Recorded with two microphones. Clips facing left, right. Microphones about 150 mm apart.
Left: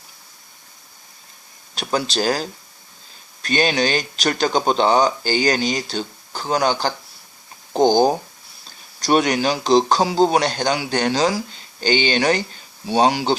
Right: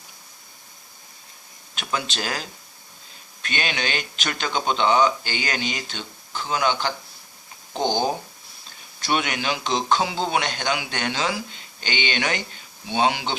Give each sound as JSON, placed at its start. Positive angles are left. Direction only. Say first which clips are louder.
{"t": 1.7, "sound": "speech", "louder": "left 6 dB", "side_deg": 35}